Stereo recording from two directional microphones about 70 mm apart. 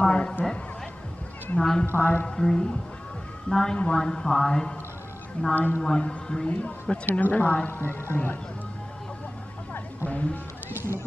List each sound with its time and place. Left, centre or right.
0.0 s a sound: centre
1.6 s a woman's voice: centre
2.0 s a woman's voice: left
2.3 s a woman's voice: centre
5.5 s a woman's voice: left
5.8 s a woman's voice: centre; by 8.4 s left
10.0 s a woman's voice: left